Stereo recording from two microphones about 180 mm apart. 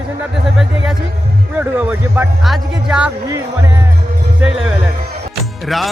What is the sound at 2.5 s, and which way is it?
Music, 5° right (ahead or behind).